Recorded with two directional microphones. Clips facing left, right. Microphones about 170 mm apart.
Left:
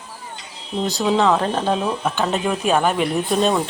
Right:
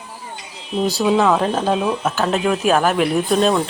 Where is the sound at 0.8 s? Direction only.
5° right (ahead or behind).